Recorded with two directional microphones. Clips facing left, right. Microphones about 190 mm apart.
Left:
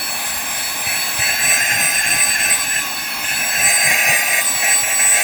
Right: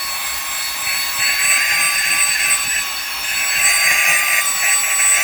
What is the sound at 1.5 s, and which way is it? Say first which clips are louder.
Vehicle: left 4 dB; 45° left (ahead or behind).